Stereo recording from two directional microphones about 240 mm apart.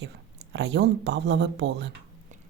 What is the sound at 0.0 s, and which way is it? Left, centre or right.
Speech, right.